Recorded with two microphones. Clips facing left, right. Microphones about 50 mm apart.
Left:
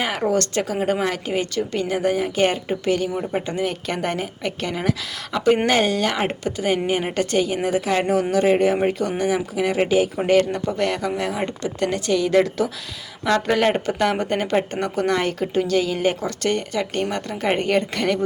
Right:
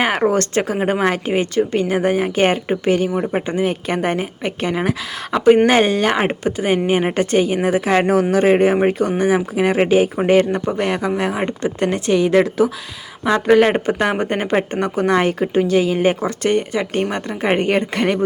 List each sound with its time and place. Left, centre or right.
0.0 s a sound: right
0.3 s a woman's voice: right
3.4 s a woman's voice: right
10.2 s speech: right